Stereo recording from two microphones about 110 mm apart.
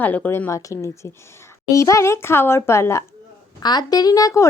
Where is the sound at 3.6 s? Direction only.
40° left (ahead or behind).